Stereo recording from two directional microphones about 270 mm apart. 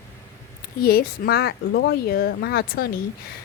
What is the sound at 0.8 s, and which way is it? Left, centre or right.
Speech, left.